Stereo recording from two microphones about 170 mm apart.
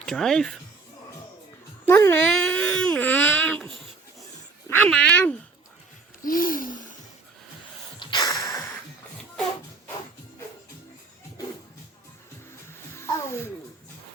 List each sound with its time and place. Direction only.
0.0 s speech: 5° left (ahead or behind)
1.9 s speech: 15° left (ahead or behind)
2.3 s baby cry: 5° left (ahead or behind)
4.7 s speech: 10° left (ahead or behind)
6.2 s a sound: 55° left (ahead or behind)
7.9 s snort: 25° left (ahead or behind)
13.0 s babbling: 15° left (ahead or behind)